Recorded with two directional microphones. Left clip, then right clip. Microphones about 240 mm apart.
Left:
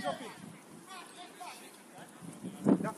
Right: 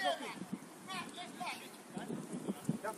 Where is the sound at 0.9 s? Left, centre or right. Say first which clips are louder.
Right 4 dB; right.